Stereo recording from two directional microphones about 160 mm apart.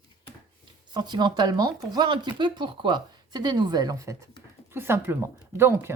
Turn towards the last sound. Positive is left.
turn(degrees=-15)  # may be behind; listen again after turning